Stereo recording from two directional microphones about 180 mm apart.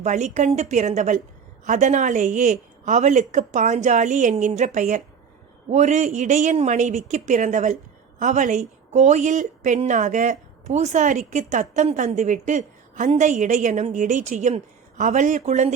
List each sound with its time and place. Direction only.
0.0 s a woman's voice: 40° right (ahead or behind)